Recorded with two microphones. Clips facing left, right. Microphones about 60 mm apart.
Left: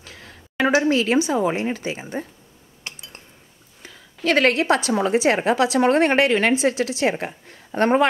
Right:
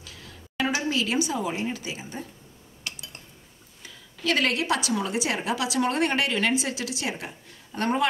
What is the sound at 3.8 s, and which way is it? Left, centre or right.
A woman's voice, left.